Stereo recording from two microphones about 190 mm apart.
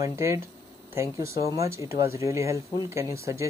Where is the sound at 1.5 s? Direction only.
15° right (ahead or behind).